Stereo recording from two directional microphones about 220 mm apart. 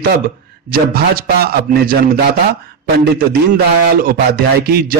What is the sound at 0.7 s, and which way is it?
A man's voice, 45° right (ahead or behind).